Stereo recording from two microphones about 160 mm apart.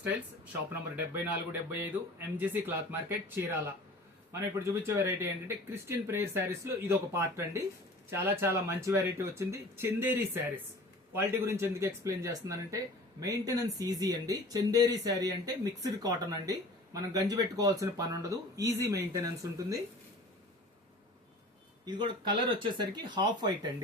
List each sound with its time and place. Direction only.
0.7 s speech: 15° right (ahead or behind)
11.1 s speech: 15° right (ahead or behind)
21.8 s speech: 30° right (ahead or behind)